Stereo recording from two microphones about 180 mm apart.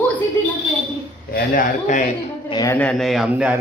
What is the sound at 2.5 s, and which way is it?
Speech, 20° left (ahead or behind).